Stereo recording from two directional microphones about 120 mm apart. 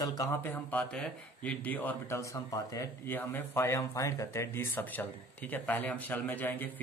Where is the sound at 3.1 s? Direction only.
15° left (ahead or behind).